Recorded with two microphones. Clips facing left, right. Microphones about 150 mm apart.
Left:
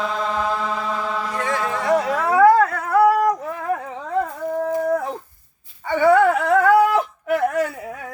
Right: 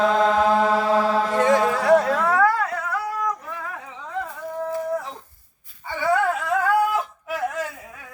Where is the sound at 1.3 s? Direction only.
20° right (ahead or behind).